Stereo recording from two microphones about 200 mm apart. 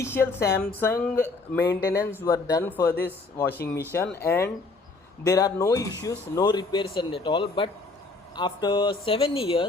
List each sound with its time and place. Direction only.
0.0 s speech: 10° left (ahead or behind); by 9.6 s 30° left (ahead or behind)